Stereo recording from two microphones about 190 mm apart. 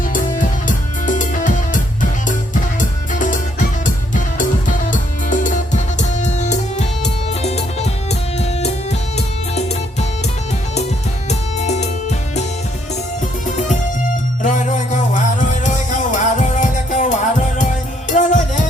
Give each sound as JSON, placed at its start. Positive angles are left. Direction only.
{"t": 0.1, "sound": "music", "side_deg": 45}
{"t": 11.3, "sound": "music", "side_deg": 35}
{"t": 14.4, "sound": "music", "side_deg": 40}